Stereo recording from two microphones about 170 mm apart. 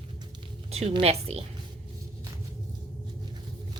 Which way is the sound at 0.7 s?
35° right (ahead or behind).